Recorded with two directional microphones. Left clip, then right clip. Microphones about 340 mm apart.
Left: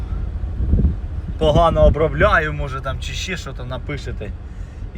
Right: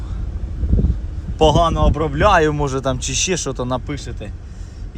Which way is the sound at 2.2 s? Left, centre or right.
Right.